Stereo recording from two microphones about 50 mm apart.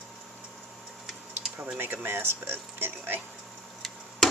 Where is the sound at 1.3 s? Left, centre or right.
Right.